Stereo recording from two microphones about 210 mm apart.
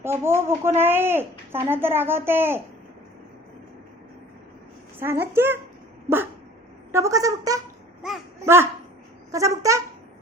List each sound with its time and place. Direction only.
0.0 s speech: 10° right (ahead or behind)
4.9 s speech: 10° right (ahead or behind)
6.9 s speech: 15° right (ahead or behind)
8.0 s a sound: 5° right (ahead or behind)
8.4 s speech: 10° right (ahead or behind)